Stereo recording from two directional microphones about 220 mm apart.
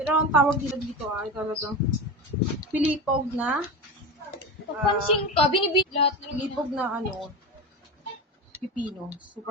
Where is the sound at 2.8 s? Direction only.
5° right (ahead or behind).